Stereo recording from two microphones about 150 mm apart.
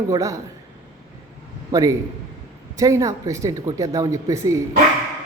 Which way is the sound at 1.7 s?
25° right (ahead or behind).